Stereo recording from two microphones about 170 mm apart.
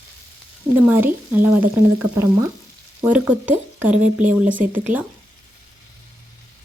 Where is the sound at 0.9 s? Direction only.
10° right (ahead or behind).